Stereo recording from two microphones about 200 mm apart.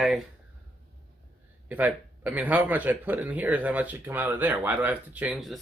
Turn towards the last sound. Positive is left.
turn(degrees=0)  # may be behind; listen again after turning